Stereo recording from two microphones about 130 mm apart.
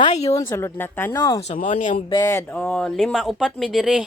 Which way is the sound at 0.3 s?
20° left (ahead or behind).